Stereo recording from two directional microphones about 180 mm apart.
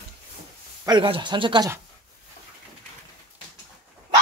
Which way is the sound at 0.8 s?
25° right (ahead or behind).